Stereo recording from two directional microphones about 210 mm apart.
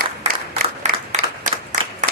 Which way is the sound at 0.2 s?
30° right (ahead or behind).